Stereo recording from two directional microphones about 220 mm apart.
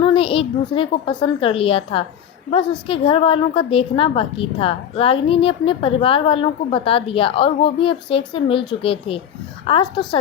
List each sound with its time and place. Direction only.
0.0 s a woman's voice: 25° left (ahead or behind)